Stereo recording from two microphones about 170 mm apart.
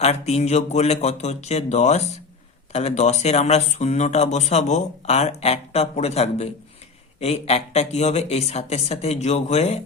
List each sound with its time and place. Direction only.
0.0 s speech: 40° left (ahead or behind)